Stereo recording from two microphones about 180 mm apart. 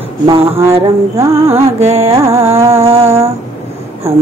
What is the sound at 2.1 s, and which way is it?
Music, 15° right (ahead or behind).